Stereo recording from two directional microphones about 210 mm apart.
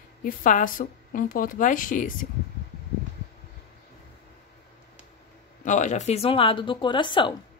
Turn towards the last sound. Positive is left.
turn(degrees=25)  # may be behind; listen again after turning